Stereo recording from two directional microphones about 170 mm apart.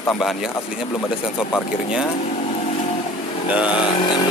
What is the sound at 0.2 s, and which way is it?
Speech, centre (ahead or behind).